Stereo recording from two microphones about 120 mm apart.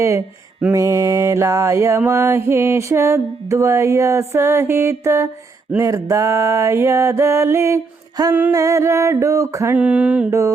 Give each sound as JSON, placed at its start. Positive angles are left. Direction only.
{"t": 0.6, "sound": "mantra", "side_deg": -25}
{"t": 8.3, "sound": "mantra", "side_deg": -15}
{"t": 9.7, "sound": "mantra", "side_deg": -10}